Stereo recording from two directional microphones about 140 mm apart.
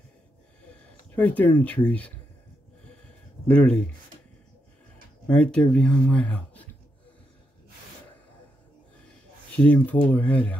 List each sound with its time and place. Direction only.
0.7 s speech: 10° left (ahead or behind)
3.4 s speech: 5° left (ahead or behind)
5.2 s speech: 10° left (ahead or behind)
9.6 s speech: 10° left (ahead or behind)